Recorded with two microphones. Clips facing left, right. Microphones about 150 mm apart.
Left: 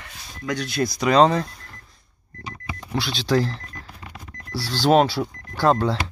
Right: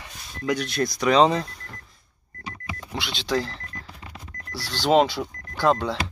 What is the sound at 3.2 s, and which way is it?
Speech, 5° left (ahead or behind).